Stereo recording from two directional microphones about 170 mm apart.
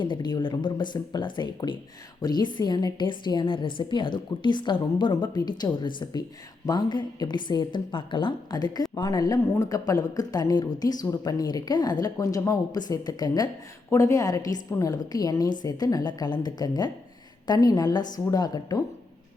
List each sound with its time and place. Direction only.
0.0 s a woman's voice: 25° left (ahead or behind)